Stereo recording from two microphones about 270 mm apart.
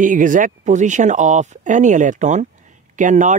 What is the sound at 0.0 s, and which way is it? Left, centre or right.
A man's voice, right.